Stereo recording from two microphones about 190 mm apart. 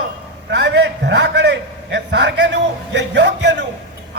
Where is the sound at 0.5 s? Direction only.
65° right (ahead or behind).